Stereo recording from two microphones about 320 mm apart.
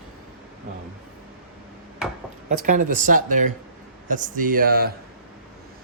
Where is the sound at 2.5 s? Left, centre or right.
Right.